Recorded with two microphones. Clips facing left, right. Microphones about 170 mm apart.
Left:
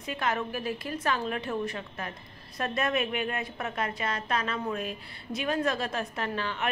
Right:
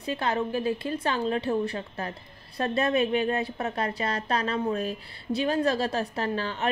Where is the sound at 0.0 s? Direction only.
30° right (ahead or behind).